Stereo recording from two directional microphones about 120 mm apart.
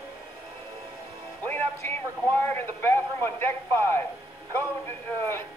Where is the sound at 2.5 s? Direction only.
20° left (ahead or behind).